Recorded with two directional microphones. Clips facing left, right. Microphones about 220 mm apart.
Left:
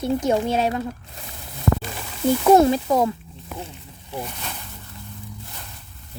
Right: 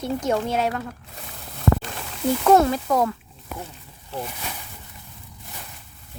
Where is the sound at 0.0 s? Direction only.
15° left (ahead or behind).